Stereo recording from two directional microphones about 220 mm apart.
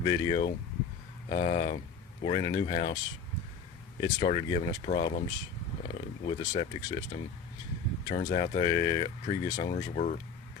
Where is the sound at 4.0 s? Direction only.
25° left (ahead or behind).